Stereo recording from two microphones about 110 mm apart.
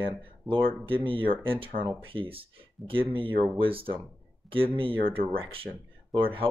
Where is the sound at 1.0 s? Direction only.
55° right (ahead or behind).